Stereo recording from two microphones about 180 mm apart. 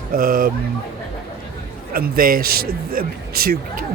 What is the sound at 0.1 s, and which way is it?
Speech, 50° right (ahead or behind).